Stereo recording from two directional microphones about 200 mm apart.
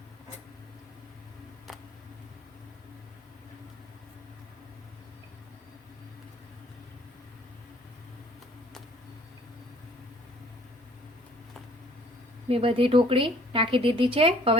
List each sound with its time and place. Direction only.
12.5 s speech: 30° right (ahead or behind)